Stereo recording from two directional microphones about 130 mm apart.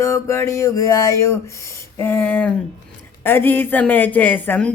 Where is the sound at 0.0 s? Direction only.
25° left (ahead or behind).